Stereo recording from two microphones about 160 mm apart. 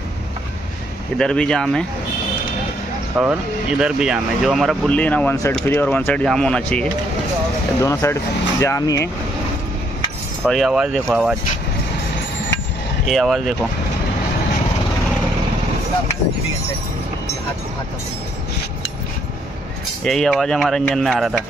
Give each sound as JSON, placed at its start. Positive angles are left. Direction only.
{"t": 1.1, "sound": "speech", "side_deg": 5}
{"t": 3.2, "sound": "speech", "side_deg": -5}
{"t": 7.8, "sound": "speech", "side_deg": 15}
{"t": 10.4, "sound": "speech", "side_deg": 0}
{"t": 13.0, "sound": "speech", "side_deg": 0}
{"t": 20.0, "sound": "speech", "side_deg": 5}